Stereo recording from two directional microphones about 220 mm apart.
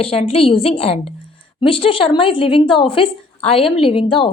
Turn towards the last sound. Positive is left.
turn(degrees=25)  # may be behind; listen again after turning